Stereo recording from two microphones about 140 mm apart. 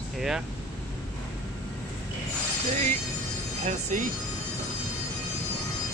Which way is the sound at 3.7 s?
55° right (ahead or behind).